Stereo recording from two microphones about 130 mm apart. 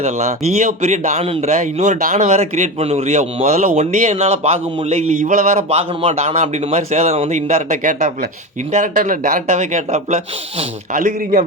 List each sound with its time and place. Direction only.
0.0 s speech: 60° right (ahead or behind)
8.7 s a man's voice: 90° right; by 10.2 s 65° right (ahead or behind)
10.9 s a man's voice: 90° right